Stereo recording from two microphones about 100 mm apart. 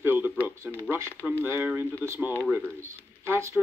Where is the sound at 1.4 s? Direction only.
20° right (ahead or behind).